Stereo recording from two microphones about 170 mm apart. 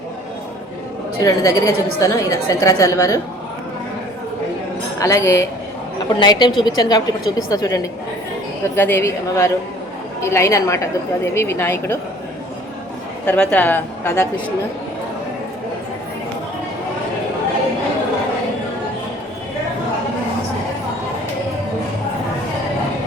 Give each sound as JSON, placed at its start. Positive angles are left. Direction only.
{"t": 1.2, "sound": "a woman's voice", "side_deg": 20}
{"t": 4.9, "sound": "a woman's voice", "side_deg": 15}
{"t": 13.2, "sound": "a woman's voice", "side_deg": 5}